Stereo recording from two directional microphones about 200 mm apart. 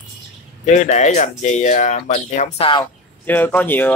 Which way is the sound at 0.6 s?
35° left (ahead or behind).